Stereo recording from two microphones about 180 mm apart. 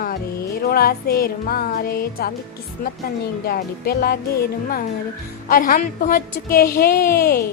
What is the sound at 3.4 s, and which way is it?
Speech, 55° left (ahead or behind).